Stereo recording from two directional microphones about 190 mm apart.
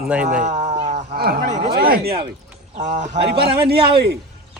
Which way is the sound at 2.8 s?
40° right (ahead or behind).